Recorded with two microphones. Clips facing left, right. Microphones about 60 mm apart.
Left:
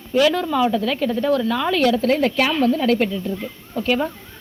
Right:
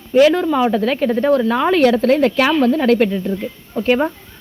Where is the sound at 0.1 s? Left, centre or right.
Right.